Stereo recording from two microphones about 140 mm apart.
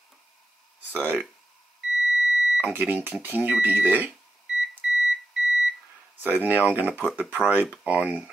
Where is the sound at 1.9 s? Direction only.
5° right (ahead or behind).